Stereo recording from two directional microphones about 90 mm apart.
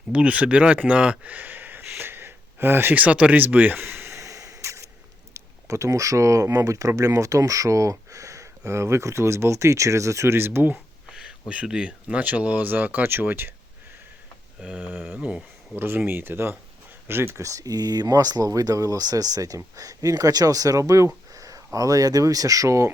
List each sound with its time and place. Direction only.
0.1 s speech: 15° right (ahead or behind)
11.1 s speech: 10° right (ahead or behind)
14.6 s speech: 15° right (ahead or behind)
15.8 s speech: 25° right (ahead or behind)